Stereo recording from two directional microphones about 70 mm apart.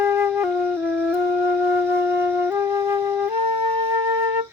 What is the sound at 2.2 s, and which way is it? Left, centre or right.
Flute, right.